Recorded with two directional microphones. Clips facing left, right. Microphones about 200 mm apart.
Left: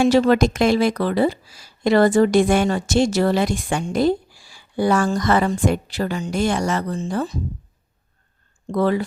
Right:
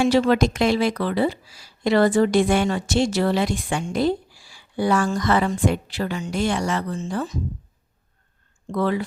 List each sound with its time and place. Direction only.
0.0 s a woman's voice: 45° left (ahead or behind)
8.7 s speech: 40° left (ahead or behind)